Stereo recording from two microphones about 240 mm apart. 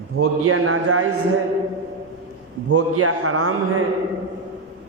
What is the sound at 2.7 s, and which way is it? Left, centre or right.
A man's voice, right.